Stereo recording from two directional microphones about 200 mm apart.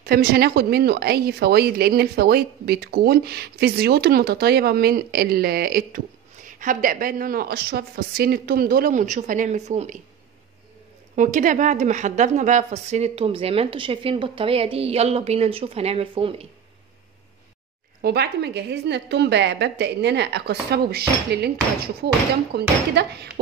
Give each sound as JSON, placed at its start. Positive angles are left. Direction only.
{"t": 0.0, "sound": "a woman's voice", "side_deg": -50}
{"t": 11.1, "sound": "a woman's voice", "side_deg": -40}
{"t": 18.0, "sound": "a woman's voice", "side_deg": -55}